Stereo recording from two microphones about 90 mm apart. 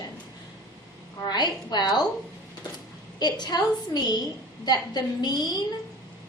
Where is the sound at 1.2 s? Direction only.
50° left (ahead or behind).